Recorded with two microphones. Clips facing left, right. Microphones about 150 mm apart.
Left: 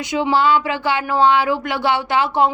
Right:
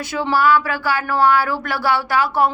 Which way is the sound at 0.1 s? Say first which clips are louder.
Even; 20° left (ahead or behind).